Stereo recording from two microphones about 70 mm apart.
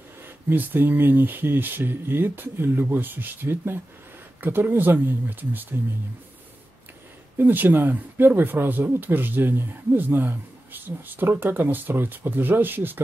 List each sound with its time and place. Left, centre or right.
0.2 s speech: right
7.3 s speech: right